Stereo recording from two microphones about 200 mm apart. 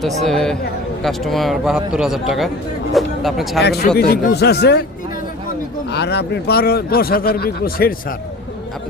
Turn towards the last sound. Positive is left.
turn(degrees=50)  # may be behind; listen again after turning